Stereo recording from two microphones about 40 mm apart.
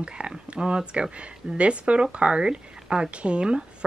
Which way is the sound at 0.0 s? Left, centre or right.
Right.